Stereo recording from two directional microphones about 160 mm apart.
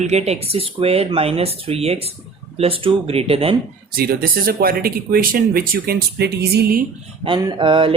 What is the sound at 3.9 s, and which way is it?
Speech, 70° right (ahead or behind).